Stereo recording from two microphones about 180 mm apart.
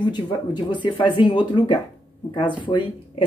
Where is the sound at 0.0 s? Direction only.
25° left (ahead or behind).